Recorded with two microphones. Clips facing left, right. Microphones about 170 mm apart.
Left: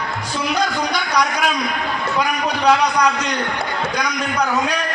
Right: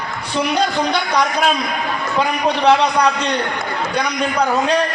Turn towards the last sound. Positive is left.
turn(degrees=-30)  # may be behind; listen again after turning